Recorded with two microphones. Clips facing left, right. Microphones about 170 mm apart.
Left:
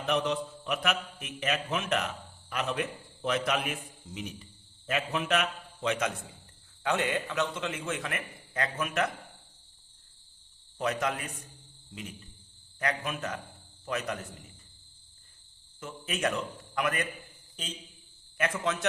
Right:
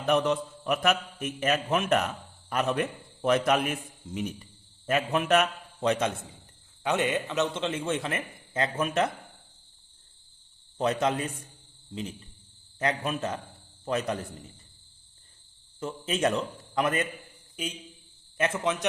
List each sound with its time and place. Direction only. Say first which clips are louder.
0.1 s a man's voice: right 5 dB; 50° right (ahead or behind)
6.8 s a man's voice: right 2 dB; 20° right (ahead or behind)
10.8 s a man's voice: right 5 dB; 30° right (ahead or behind)
12.8 s a man's voice: right 4 dB; 30° right (ahead or behind)
15.8 s a man's voice: right 5 dB; 30° right (ahead or behind)
17.6 s a man's voice: right 7 dB; 10° right (ahead or behind)
18.3 s a man's voice: right 3 dB; 25° right (ahead or behind)